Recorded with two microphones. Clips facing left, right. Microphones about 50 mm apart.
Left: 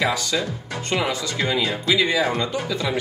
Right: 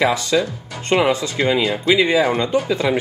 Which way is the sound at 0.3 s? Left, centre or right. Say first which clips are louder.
Right 6 dB; centre.